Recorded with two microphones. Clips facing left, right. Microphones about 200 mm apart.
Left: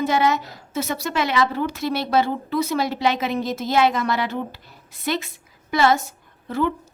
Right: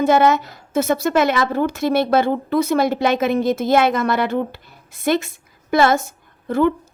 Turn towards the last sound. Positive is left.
turn(degrees=-55)  # may be behind; listen again after turning